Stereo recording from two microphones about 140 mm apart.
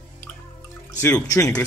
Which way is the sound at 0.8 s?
20° left (ahead or behind).